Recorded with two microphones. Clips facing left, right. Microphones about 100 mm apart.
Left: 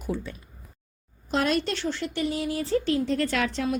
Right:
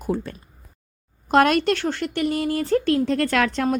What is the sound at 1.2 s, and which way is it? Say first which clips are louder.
Speech: right 8 dB; 60° right (ahead or behind).